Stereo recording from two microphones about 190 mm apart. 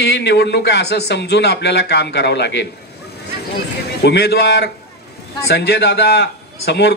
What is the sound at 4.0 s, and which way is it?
A man's voice, 60° left (ahead or behind).